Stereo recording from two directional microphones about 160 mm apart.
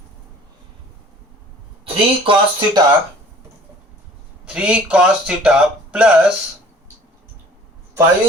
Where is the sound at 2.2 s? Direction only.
30° right (ahead or behind).